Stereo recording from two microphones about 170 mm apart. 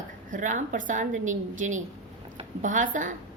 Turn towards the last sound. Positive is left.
turn(degrees=-50)  # may be behind; listen again after turning